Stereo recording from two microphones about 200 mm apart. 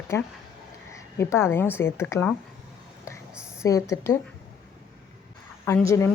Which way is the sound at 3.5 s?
15° left (ahead or behind).